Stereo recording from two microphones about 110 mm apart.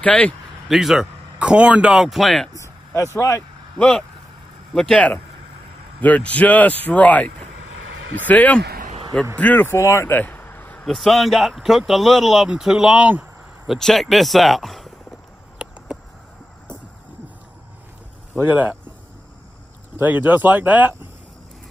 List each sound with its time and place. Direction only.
0.0 s a man's voice: 10° left (ahead or behind)
0.7 s speech: 5° right (ahead or behind)
2.5 s a sound: 25° left (ahead or behind)
3.2 s speech: 30° left (ahead or behind)
3.7 s a man's voice: 5° left (ahead or behind)
10.9 s speech: centre (ahead or behind)
13.7 s speech: 5° left (ahead or behind)
18.4 s speech: 15° right (ahead or behind)
20.0 s speech: 15° right (ahead or behind)